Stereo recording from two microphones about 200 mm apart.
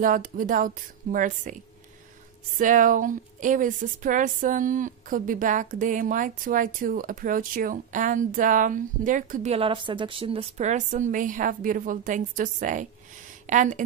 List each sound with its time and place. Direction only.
0.0 s speech: 45° right (ahead or behind)
2.6 s speech: 40° right (ahead or behind)